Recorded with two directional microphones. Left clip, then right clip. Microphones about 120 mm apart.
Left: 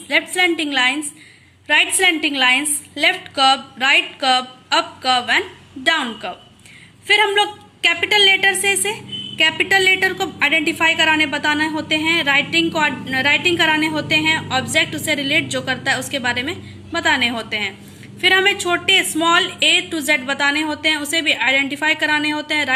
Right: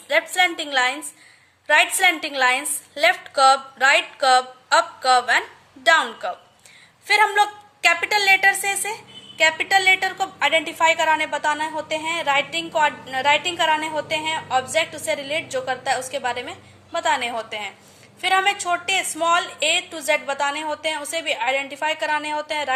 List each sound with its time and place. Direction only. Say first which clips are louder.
0.3 s a woman's voice: left 2 dB; 45° right (ahead or behind); by 9.0 s 30° right (ahead or behind)
9.4 s a woman's voice: left 2 dB; 15° right (ahead or behind)